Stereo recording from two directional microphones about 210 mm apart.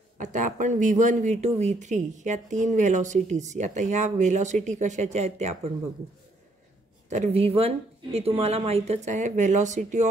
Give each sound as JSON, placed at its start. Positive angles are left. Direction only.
{"t": 0.2, "sound": "speech", "side_deg": -35}
{"t": 7.1, "sound": "speech", "side_deg": -30}